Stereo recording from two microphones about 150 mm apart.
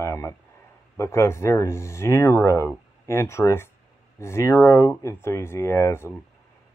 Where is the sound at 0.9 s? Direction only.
20° left (ahead or behind).